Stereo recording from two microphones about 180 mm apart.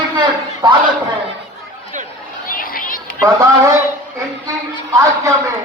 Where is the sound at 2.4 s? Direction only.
50° left (ahead or behind).